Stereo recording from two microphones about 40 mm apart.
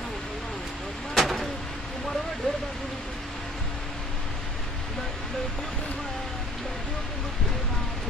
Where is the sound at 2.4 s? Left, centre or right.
Centre.